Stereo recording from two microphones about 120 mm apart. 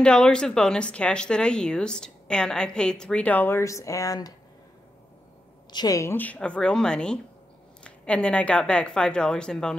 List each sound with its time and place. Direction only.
0.0 s speech: 10° left (ahead or behind); by 4.3 s 30° left (ahead or behind)
5.7 s a woman's voice: 35° left (ahead or behind)
6.1 s speech: 10° left (ahead or behind)